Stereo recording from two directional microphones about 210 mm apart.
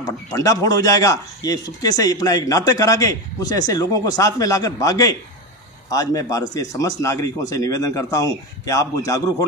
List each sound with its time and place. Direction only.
0.0 s a man's voice: 15° left (ahead or behind)